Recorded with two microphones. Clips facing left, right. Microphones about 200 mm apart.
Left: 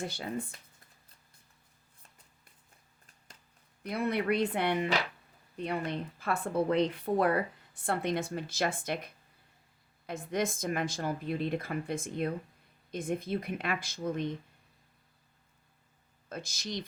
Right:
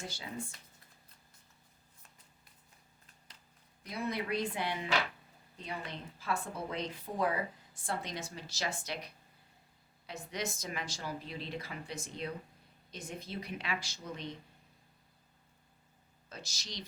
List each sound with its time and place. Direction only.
0.0 s speech: 60° left (ahead or behind)
3.8 s speech: 60° left (ahead or behind)
16.3 s speech: 55° left (ahead or behind)